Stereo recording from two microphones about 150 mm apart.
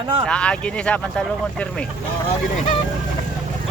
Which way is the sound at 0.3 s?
5° left (ahead or behind).